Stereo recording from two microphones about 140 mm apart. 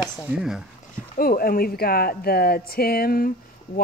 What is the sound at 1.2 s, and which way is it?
Speech, 90° left.